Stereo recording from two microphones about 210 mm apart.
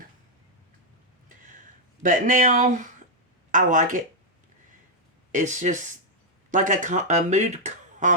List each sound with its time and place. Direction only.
1.3 s a sound: 40° right (ahead or behind)
2.0 s speech: 40° right (ahead or behind)
5.3 s speech: 35° right (ahead or behind)